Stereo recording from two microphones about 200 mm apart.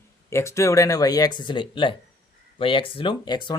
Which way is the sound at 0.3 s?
15° left (ahead or behind).